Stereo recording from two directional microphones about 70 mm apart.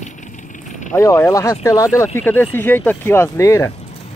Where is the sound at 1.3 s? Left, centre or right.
Left.